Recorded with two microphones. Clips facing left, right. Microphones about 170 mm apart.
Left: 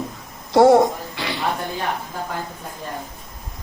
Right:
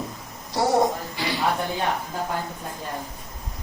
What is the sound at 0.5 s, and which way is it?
Speech, 60° left (ahead or behind).